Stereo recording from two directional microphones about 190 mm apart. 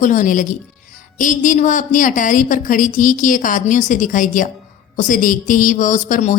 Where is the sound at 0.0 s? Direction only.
40° left (ahead or behind).